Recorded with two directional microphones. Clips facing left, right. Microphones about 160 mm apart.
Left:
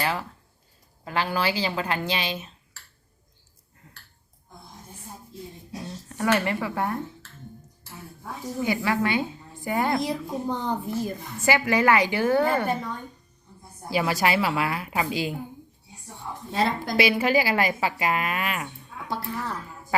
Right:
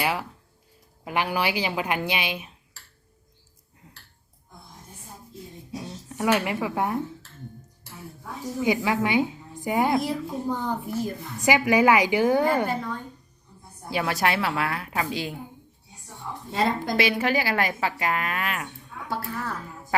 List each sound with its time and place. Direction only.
0.0 s a woman's voice: 10° right (ahead or behind)
6.1 s a woman's voice: 10° right (ahead or behind)
8.6 s a woman's voice: 15° right (ahead or behind)
10.1 s speech: 20° left (ahead or behind)
10.7 s a woman's voice: 10° right (ahead or behind)
13.9 s a woman's voice: 5° left (ahead or behind)
16.5 s a woman's voice: 5° left (ahead or behind)